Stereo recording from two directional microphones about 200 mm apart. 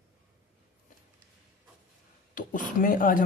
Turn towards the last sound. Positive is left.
turn(degrees=45)  # may be behind; listen again after turning